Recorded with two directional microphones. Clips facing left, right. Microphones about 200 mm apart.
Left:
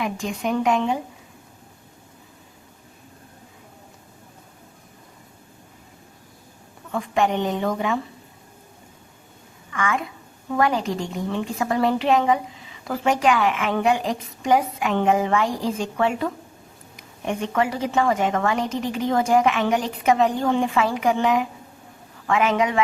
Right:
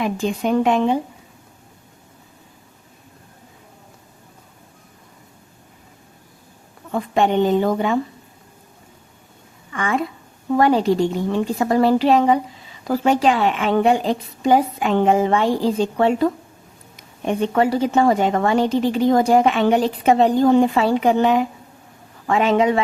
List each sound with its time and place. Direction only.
0.0 s a woman's voice: 30° right (ahead or behind)
6.9 s a woman's voice: 35° right (ahead or behind)
9.7 s a woman's voice: 35° right (ahead or behind)